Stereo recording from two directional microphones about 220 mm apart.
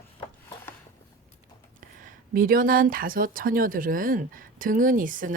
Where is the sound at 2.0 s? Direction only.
40° right (ahead or behind).